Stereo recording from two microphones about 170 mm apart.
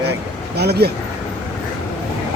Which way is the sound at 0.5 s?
75° right (ahead or behind).